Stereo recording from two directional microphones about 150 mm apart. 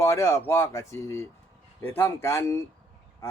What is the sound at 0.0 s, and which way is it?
Speech, 20° left (ahead or behind).